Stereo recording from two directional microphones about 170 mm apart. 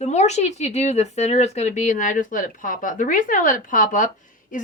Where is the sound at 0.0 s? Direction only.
40° left (ahead or behind).